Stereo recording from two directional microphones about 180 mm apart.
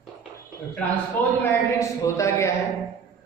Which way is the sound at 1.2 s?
10° left (ahead or behind).